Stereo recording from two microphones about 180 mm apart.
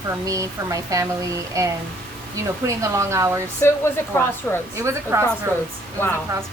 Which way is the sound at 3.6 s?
15° left (ahead or behind).